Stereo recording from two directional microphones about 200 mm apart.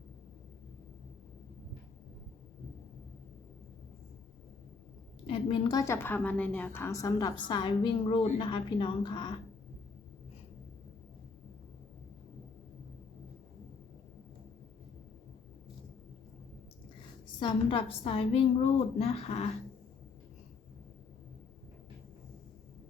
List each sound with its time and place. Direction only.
5.2 s a woman's voice: 25° left (ahead or behind)
17.4 s a woman's voice: 25° left (ahead or behind)